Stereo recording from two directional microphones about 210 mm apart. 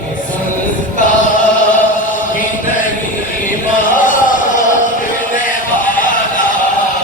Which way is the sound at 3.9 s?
40° left (ahead or behind).